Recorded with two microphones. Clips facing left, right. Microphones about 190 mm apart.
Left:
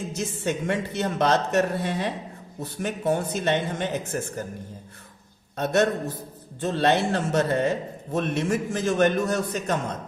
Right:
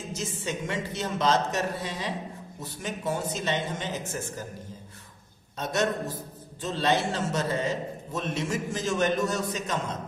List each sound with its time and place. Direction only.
0.1 s speech: 60° left (ahead or behind)
5.5 s speech: 60° left (ahead or behind)